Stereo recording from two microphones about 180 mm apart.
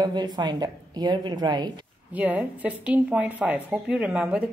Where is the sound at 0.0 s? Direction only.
25° right (ahead or behind).